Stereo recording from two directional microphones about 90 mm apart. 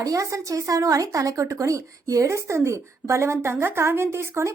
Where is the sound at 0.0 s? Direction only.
40° right (ahead or behind).